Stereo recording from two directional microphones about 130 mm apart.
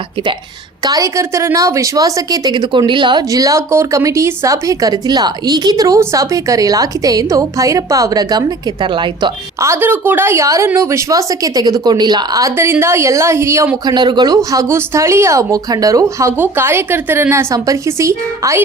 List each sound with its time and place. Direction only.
0.9 s a woman's voice: 25° right (ahead or behind)
9.6 s a woman's voice: 20° right (ahead or behind)
13.8 s a woman's voice: 35° right (ahead or behind)